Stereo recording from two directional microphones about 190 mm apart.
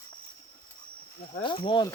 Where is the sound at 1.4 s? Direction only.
25° left (ahead or behind).